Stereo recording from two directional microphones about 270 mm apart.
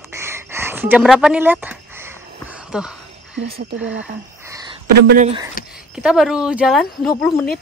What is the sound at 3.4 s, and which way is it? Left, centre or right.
Speech, right.